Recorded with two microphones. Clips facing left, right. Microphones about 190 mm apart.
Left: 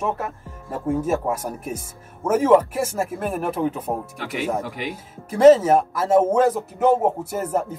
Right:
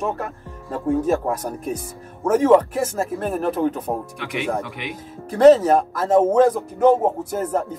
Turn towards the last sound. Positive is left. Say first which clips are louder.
# right 1 dB
turn(degrees=10)  # may be behind; listen again after turning